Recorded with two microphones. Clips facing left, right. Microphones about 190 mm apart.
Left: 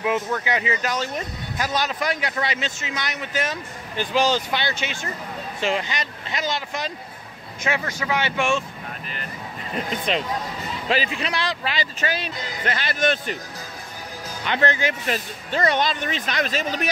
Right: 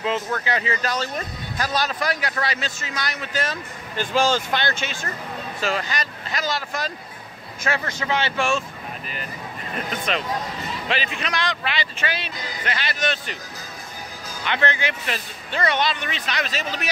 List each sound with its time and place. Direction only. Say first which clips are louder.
0.0 s speech: left 1 dB; 15° left (ahead or behind)
5.6 s speech: left 1 dB; 20° left (ahead or behind)
10.9 s speech: left 4 dB; 35° left (ahead or behind); by 13.4 s 50° left (ahead or behind)
14.4 s speech: left 2 dB; 40° left (ahead or behind)